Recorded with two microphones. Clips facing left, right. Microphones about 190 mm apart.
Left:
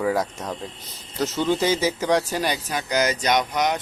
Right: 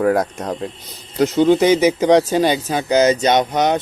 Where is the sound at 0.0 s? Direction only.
55° right (ahead or behind).